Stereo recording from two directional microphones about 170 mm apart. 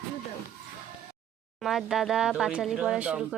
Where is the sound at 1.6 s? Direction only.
Centre (ahead or behind).